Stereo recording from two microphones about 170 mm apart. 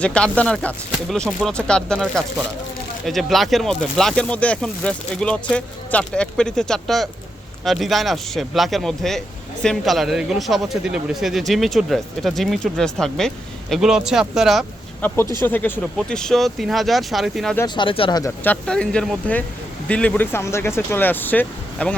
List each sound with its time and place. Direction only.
0.0 s a man's voice: 5° left (ahead or behind)
15.0 s a man's voice: 15° left (ahead or behind)
17.7 s speech: 30° left (ahead or behind)
18.2 s speech: 10° left (ahead or behind)